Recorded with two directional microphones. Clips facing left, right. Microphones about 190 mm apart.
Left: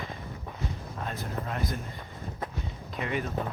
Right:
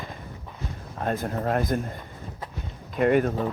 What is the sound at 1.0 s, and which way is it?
Speech, 50° right (ahead or behind).